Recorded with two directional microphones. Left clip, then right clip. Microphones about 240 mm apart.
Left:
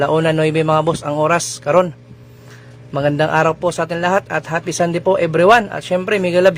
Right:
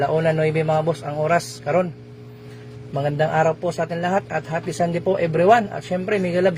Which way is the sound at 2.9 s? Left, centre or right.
Left.